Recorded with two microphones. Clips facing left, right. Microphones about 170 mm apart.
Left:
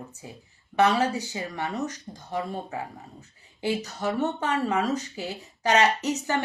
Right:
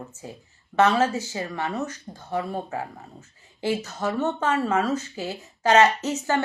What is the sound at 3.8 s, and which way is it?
Speech, 15° left (ahead or behind).